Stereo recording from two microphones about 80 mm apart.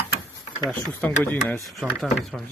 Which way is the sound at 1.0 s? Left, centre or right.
Left.